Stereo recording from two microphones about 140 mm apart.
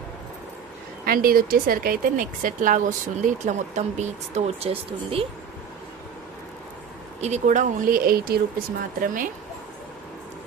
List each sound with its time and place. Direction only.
1.0 s speech: 90° right; by 5.2 s 40° right (ahead or behind)
7.2 s speech: 55° right (ahead or behind); by 8.4 s 90° right
9.0 s speech: 80° right